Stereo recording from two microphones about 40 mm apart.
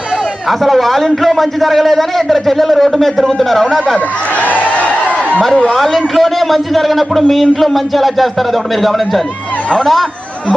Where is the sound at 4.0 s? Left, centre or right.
Left.